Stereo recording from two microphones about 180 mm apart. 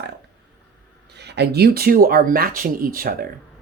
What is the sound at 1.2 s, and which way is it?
Speech, 70° right (ahead or behind).